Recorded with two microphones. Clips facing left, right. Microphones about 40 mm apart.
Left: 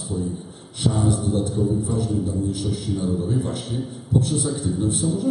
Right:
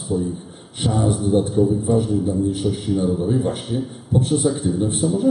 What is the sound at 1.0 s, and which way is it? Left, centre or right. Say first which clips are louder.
A man's voice: right 4 dB; right.